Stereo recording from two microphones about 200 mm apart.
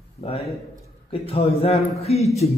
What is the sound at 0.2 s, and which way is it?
A man's voice, 30° left (ahead or behind).